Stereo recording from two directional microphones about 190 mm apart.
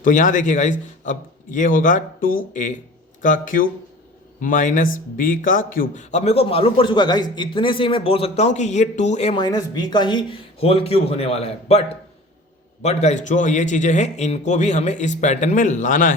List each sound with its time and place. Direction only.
0.0 s a man's voice: 45° left (ahead or behind)
12.8 s a man's voice: 35° left (ahead or behind)